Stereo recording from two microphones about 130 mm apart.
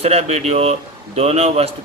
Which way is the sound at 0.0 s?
55° right (ahead or behind).